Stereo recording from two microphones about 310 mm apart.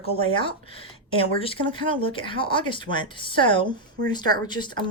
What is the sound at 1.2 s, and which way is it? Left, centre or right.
Speech, centre.